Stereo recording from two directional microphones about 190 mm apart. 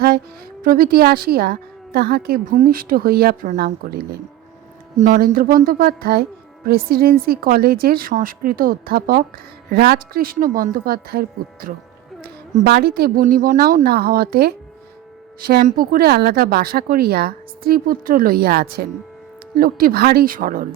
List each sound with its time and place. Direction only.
0.6 s a woman's voice: 50° right (ahead or behind)
12.8 s a woman's voice: 55° right (ahead or behind)